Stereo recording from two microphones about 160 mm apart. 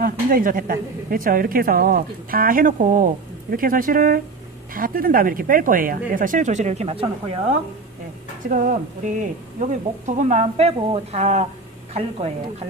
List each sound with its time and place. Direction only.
0.0 s a woman's voice: 60° right (ahead or behind); by 7.5 s 40° right (ahead or behind)
8.5 s a woman's voice: 55° right (ahead or behind)